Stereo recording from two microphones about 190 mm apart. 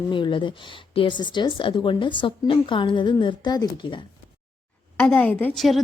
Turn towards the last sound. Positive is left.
turn(degrees=0)  # may be behind; listen again after turning